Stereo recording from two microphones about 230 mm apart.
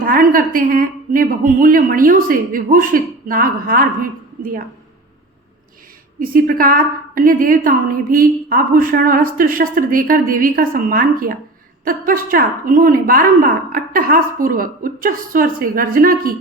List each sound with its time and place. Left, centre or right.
0.0 s a woman's voice: right
6.1 s a woman's voice: right